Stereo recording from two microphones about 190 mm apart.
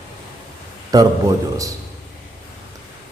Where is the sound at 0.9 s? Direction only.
20° right (ahead or behind).